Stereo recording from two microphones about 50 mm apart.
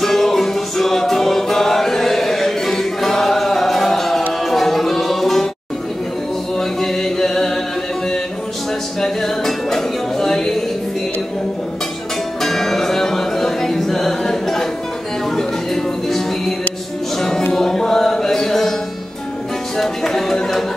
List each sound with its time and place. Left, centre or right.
0.0 s music: centre
6.6 s music: centre
9.0 s music: centre
12.4 s music: centre
19.8 s music: centre